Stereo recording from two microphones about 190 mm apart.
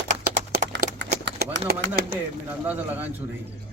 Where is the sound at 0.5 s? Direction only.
70° right (ahead or behind).